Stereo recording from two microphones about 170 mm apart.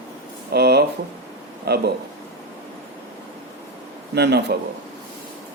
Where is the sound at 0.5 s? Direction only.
75° right (ahead or behind).